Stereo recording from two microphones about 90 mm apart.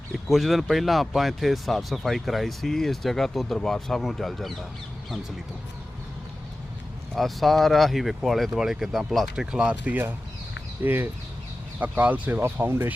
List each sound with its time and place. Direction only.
0.3 s speech: centre (ahead or behind)
7.2 s speech: centre (ahead or behind); by 12.9 s 25° right (ahead or behind)